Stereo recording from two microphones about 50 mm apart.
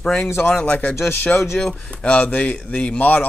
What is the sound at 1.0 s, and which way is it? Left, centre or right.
Speech, left.